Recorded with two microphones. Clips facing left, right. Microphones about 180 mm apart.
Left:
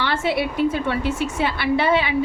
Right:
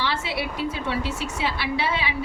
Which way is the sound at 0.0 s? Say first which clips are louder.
Left 6 dB; 55° left (ahead or behind).